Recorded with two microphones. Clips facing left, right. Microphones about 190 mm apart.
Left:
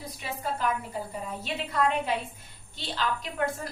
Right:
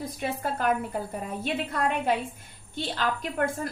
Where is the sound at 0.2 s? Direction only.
55° right (ahead or behind).